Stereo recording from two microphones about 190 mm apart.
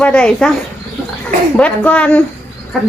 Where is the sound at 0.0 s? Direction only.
5° left (ahead or behind).